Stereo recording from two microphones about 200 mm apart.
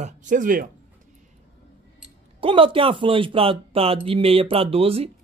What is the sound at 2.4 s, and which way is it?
A woman's voice, 25° right (ahead or behind).